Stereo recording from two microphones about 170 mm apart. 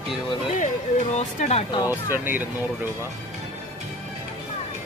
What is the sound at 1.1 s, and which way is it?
Speech, 40° left (ahead or behind).